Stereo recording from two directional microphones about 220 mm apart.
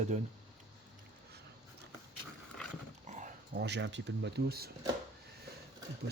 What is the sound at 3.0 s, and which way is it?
Dog, 35° right (ahead or behind).